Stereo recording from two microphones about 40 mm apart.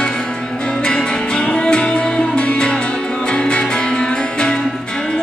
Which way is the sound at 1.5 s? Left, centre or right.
Left.